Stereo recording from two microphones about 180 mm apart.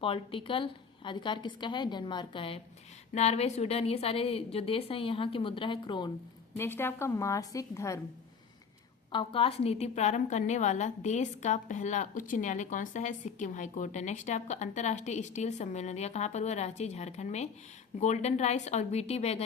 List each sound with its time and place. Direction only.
0.0 s a woman's voice: 30° left (ahead or behind)
6.6 s a woman's voice: 10° left (ahead or behind)
9.1 s a woman's voice: 30° left (ahead or behind)